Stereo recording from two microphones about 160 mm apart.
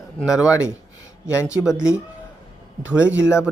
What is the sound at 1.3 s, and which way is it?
Speech, 20° left (ahead or behind).